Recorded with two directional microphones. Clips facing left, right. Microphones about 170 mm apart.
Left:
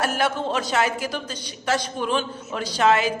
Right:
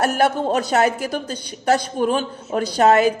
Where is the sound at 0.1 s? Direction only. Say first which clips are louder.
Right 5 dB; 45° right (ahead or behind).